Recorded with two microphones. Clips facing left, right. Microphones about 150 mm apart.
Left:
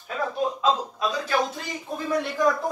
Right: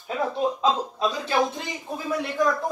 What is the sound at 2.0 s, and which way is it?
Speech, centre (ahead or behind).